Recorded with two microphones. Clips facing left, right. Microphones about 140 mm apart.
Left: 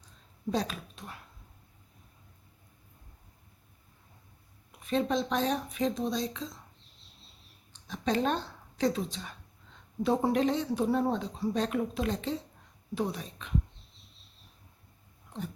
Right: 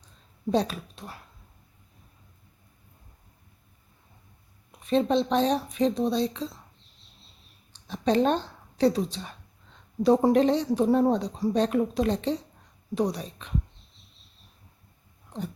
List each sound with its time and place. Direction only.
0.5 s speech: 30° right (ahead or behind)
4.9 s speech: 30° right (ahead or behind)
7.9 s speech: 30° right (ahead or behind)